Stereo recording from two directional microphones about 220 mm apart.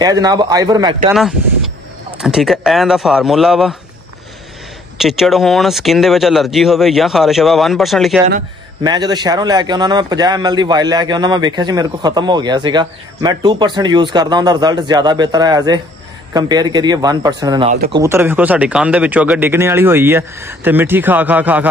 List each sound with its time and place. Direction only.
0.0 s speech: 15° right (ahead or behind)
2.1 s speech: centre (ahead or behind)
4.9 s speech: centre (ahead or behind)
8.8 s a man's voice: 20° right (ahead or behind)